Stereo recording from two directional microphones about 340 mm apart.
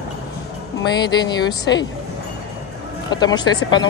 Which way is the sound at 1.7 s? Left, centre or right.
Left.